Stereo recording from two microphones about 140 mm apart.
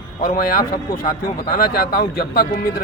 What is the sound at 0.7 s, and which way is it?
Speech, 35° left (ahead or behind).